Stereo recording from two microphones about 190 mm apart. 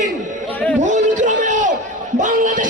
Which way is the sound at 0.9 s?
40° right (ahead or behind).